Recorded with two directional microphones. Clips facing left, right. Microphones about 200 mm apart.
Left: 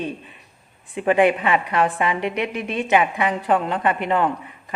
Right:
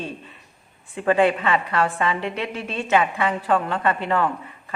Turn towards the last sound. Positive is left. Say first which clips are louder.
# left 1 dB
turn(degrees=15)  # may be behind; listen again after turning